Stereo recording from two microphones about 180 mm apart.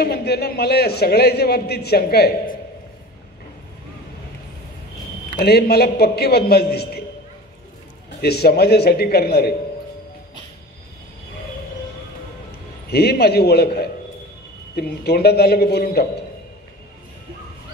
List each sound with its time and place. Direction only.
0.0 s a man's voice: 60° left (ahead or behind)
5.3 s a man's voice: 60° left (ahead or behind)
8.2 s a man's voice: 60° left (ahead or behind)
12.9 s a man's voice: 60° left (ahead or behind)